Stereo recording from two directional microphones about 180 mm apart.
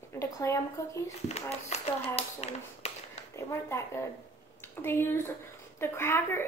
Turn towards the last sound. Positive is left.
turn(degrees=15)  # may be behind; listen again after turning